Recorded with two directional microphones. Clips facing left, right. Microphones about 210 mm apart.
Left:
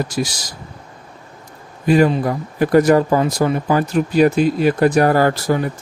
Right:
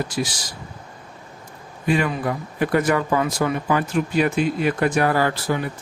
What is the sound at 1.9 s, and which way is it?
Speech, 35° left (ahead or behind).